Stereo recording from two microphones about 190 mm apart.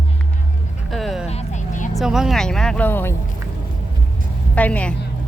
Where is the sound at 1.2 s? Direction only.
35° left (ahead or behind).